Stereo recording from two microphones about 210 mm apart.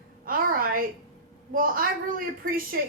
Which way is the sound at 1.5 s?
40° right (ahead or behind).